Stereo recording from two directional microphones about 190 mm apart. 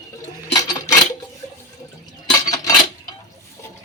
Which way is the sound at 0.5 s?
20° left (ahead or behind).